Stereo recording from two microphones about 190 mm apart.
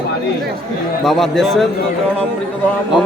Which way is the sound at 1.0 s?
Centre (ahead or behind).